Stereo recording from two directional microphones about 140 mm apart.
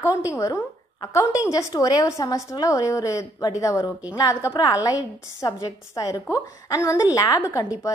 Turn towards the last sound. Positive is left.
turn(degrees=25)  # may be behind; listen again after turning